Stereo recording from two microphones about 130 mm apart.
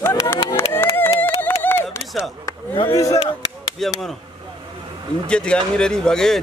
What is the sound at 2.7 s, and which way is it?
Speech, 40° left (ahead or behind).